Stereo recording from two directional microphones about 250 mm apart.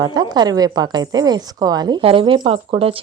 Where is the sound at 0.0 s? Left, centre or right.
Centre.